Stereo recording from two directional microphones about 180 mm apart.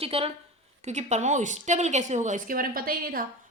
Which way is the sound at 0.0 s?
35° right (ahead or behind).